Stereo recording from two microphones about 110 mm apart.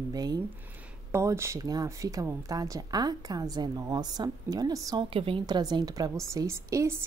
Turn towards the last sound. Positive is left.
turn(degrees=-25)  # may be behind; listen again after turning